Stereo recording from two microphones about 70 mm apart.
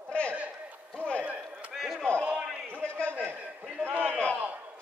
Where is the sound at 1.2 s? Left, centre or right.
Centre.